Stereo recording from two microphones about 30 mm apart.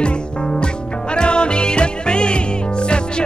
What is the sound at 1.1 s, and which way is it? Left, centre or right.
Music, left.